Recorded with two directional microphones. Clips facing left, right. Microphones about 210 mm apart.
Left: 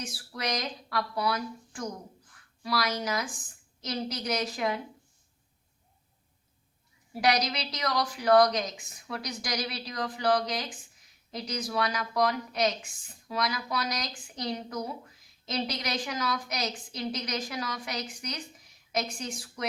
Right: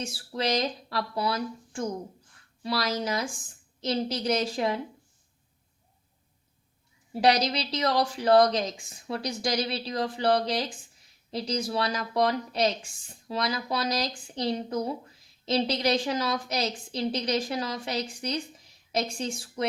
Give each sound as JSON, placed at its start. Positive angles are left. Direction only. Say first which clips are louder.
{"t": 0.0, "sound": "a woman's voice", "louder": "right 5 dB", "side_deg": -25}
{"t": 7.1, "sound": "a woman's voice", "louder": "right 4 dB", "side_deg": -30}